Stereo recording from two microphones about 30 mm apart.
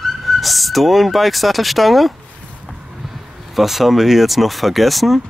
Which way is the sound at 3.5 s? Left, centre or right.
Centre.